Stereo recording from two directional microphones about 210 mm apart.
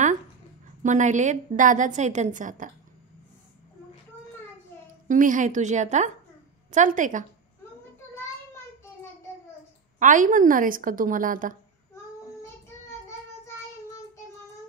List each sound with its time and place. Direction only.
0.8 s a woman's voice: 35° right (ahead or behind)
5.0 s a woman's voice: 40° right (ahead or behind)
9.9 s a woman's voice: 40° right (ahead or behind)